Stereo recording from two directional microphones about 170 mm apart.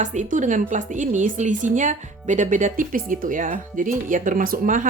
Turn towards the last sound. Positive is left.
turn(degrees=-50)  # may be behind; listen again after turning